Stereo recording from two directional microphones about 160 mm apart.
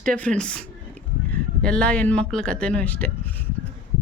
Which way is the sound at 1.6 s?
5° left (ahead or behind).